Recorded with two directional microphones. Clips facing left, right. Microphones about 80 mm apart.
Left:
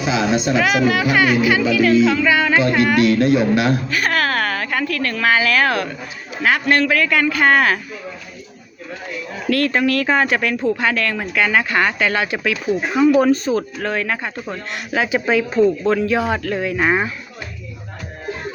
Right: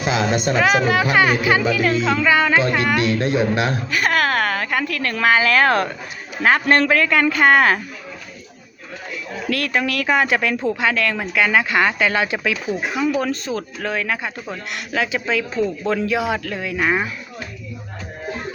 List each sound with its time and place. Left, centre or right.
0.0 s music: right
0.6 s speech: right
2.3 s a man's voice: right
3.9 s a woman's voice: centre
9.6 s speech: centre
10.1 s speech: centre
13.0 s speech: centre
14.9 s speech: centre
15.6 s speech: centre